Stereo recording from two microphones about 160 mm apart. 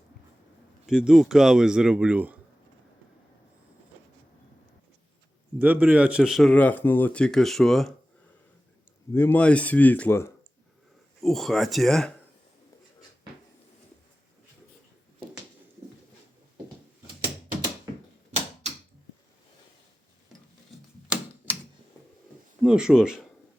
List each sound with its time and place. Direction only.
0.9 s a man's voice: 5° right (ahead or behind)
5.5 s a man's voice: 10° right (ahead or behind)
6.5 s speech: 10° left (ahead or behind)
9.1 s speech: 10° left (ahead or behind)
11.2 s a man's voice: centre (ahead or behind)
18.3 s typewriter: 45° right (ahead or behind)
22.6 s speech: 5° right (ahead or behind)